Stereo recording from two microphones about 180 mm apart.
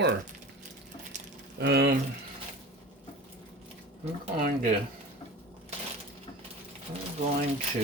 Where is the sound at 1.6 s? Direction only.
65° right (ahead or behind).